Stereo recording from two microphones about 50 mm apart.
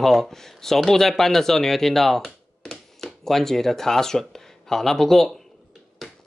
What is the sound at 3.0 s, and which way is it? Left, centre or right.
Speech, centre.